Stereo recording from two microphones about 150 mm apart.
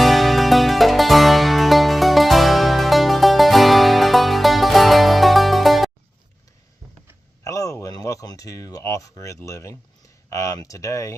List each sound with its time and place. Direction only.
0.0 s music: centre (ahead or behind)
7.4 s a sound: 20° left (ahead or behind)
10.2 s speech: 20° left (ahead or behind)